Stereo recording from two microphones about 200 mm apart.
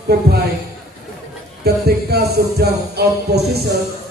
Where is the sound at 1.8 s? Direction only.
55° right (ahead or behind).